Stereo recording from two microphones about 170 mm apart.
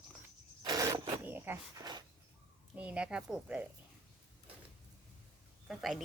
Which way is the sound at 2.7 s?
5° right (ahead or behind).